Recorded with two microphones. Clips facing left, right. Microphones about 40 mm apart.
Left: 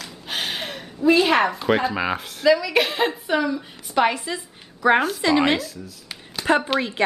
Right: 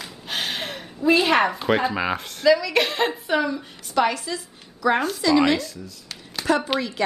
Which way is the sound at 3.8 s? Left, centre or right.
Left.